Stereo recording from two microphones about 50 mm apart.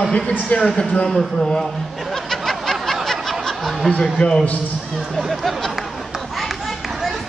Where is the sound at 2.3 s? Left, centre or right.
Centre.